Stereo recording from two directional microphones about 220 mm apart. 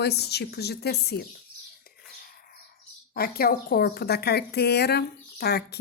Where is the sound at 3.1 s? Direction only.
45° left (ahead or behind).